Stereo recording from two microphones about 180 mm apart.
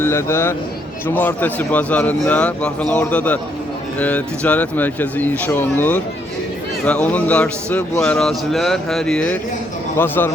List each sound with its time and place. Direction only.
0.0 s speech: 15° left (ahead or behind)